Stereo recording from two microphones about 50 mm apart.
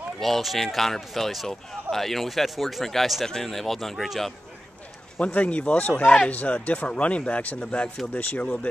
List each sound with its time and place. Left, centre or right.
0.2 s speech: centre
5.2 s speech: left